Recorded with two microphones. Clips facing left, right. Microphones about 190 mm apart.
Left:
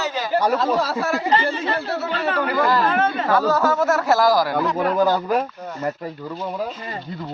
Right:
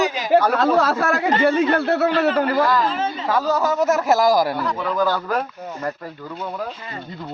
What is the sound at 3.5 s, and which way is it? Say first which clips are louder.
Speech: even; 15° right (ahead or behind).